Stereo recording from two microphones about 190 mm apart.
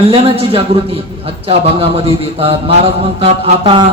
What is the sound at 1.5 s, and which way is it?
Mantra, 30° right (ahead or behind).